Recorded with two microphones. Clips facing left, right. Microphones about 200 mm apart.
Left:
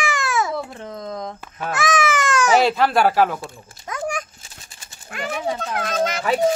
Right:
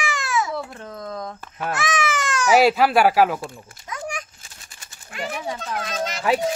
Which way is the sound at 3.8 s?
50° left (ahead or behind).